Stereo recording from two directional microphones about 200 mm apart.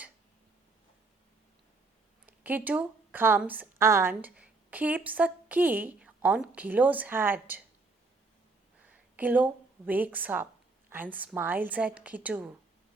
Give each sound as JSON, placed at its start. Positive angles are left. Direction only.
{"t": 2.2, "sound": "a woman's voice", "side_deg": -10}
{"t": 8.9, "sound": "a woman's voice", "side_deg": -10}